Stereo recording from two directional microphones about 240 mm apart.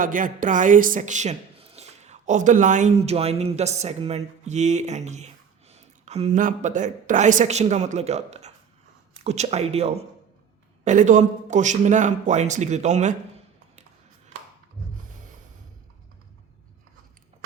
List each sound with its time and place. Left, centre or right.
0.0 s a man's voice: right